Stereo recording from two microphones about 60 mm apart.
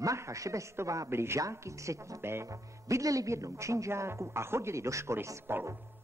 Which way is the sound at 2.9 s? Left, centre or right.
Right.